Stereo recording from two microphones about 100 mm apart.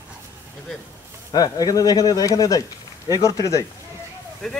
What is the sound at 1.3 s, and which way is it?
Speech, 40° left (ahead or behind).